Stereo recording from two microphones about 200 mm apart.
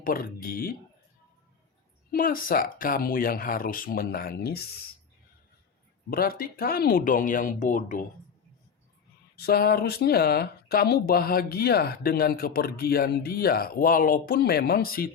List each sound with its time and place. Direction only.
0.0 s speech: 45° left (ahead or behind)
2.1 s speech: 45° left (ahead or behind)
6.1 s speech: 50° left (ahead or behind)
9.3 s speech: 50° left (ahead or behind)